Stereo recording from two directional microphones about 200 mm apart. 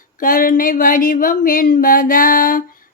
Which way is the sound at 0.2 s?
45° left (ahead or behind).